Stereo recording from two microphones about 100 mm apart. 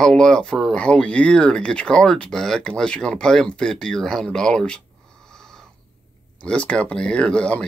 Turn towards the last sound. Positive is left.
turn(degrees=10)  # may be behind; listen again after turning